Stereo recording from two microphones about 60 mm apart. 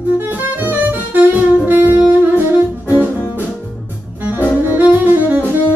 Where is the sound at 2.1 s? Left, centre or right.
Right.